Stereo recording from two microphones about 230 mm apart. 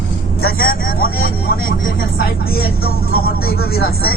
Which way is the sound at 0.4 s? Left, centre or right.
Left.